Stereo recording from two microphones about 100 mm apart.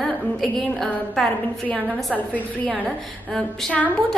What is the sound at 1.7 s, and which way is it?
Speech, 15° left (ahead or behind).